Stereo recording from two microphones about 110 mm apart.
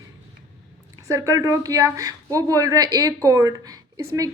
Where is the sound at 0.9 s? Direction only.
30° right (ahead or behind).